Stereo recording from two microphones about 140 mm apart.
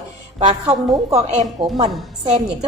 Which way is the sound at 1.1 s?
50° right (ahead or behind).